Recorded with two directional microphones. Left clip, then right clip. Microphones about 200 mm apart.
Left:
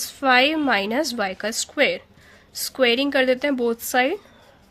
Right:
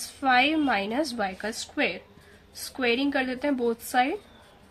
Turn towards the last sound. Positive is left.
turn(degrees=45)  # may be behind; listen again after turning